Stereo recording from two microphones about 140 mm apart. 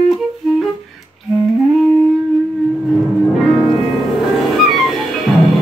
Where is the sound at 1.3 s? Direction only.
Centre (ahead or behind).